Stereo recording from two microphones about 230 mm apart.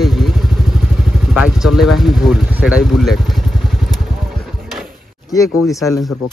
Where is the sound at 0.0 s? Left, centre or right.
Centre.